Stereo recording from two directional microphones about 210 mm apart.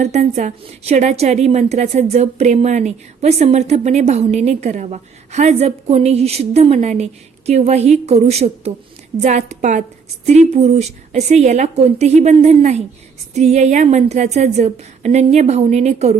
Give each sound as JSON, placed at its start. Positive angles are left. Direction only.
{"t": 0.0, "sound": "a woman's voice", "side_deg": -35}